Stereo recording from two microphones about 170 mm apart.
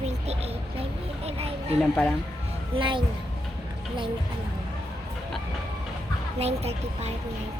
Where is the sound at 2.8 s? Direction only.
30° right (ahead or behind).